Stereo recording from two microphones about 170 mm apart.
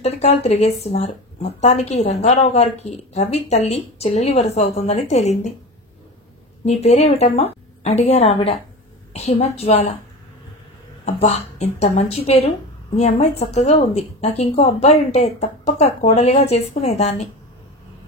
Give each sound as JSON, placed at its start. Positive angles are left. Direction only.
{"t": 0.0, "sound": "speech", "side_deg": 40}
{"t": 6.6, "sound": "speech", "side_deg": 40}
{"t": 11.1, "sound": "speech", "side_deg": 40}